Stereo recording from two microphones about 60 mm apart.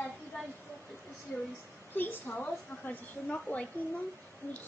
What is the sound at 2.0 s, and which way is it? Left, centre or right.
A woman's voice, left.